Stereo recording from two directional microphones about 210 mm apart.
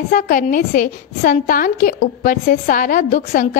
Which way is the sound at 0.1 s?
40° left (ahead or behind).